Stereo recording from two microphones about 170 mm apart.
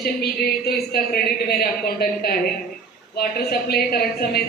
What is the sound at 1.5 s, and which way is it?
Speech, 60° left (ahead or behind).